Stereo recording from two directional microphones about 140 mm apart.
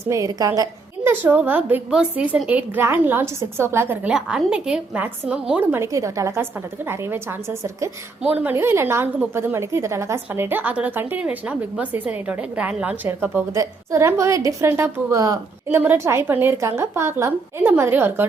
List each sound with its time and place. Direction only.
0.1 s a woman's voice: 25° right (ahead or behind)
1.2 s a woman's voice: 10° right (ahead or behind)
4.1 s a woman's voice: 5° right (ahead or behind)